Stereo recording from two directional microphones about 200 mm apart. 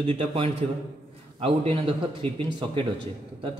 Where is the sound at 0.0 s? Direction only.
30° right (ahead or behind).